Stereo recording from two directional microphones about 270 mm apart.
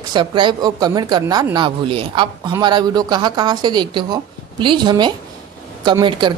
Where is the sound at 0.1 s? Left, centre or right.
Centre.